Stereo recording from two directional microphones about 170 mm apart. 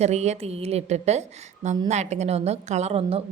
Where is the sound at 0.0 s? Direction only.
40° right (ahead or behind).